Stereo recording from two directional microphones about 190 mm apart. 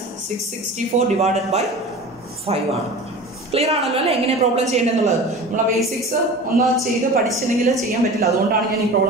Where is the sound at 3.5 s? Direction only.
30° right (ahead or behind).